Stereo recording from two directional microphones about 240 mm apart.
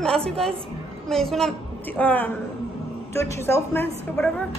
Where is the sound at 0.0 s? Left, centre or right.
Centre.